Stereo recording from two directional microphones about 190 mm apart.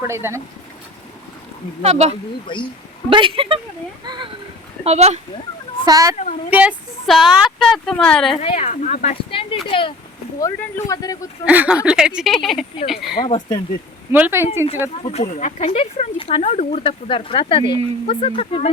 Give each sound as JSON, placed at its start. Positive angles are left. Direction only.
{"t": 0.1, "sound": "a woman's voice", "side_deg": -15}
{"t": 1.8, "sound": "speech", "side_deg": -35}
{"t": 4.8, "sound": "speech", "side_deg": -35}
{"t": 5.8, "sound": "speech", "side_deg": -20}
{"t": 6.5, "sound": "speech", "side_deg": -5}
{"t": 8.3, "sound": "speech", "side_deg": 35}
{"t": 11.4, "sound": "speech", "side_deg": -10}
{"t": 13.2, "sound": "speech", "side_deg": 25}
{"t": 14.1, "sound": "a woman's voice", "side_deg": -10}
{"t": 15.0, "sound": "speech", "side_deg": 35}